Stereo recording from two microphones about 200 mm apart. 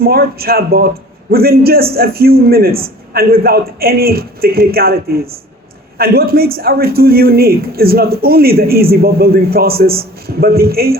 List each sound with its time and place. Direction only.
0.0 s a man's voice: 50° right (ahead or behind)